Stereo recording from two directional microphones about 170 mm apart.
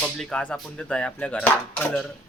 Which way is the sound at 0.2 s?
5° left (ahead or behind).